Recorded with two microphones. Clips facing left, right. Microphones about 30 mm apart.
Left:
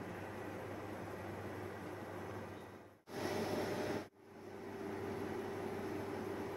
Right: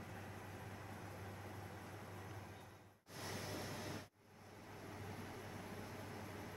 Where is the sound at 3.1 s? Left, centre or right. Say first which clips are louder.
Left 9 dB; left.